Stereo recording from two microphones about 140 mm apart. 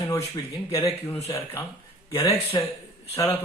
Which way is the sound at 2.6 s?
35° left (ahead or behind).